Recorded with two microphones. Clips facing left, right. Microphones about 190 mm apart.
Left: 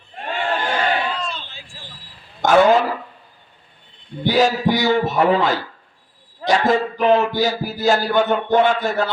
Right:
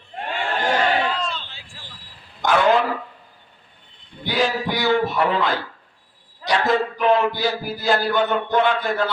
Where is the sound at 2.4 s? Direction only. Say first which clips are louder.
Left 4 dB; 45° left (ahead or behind).